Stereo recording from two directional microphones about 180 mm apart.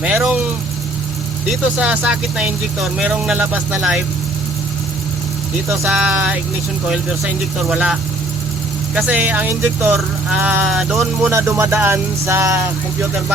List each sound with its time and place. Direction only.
0.0 s speech: 5° right (ahead or behind)
1.8 s speech: 5° right (ahead or behind)
5.7 s speech: 10° right (ahead or behind)
7.7 s speech: 5° right (ahead or behind)
9.0 s speech: 10° right (ahead or behind)
11.3 s speech: 15° right (ahead or behind)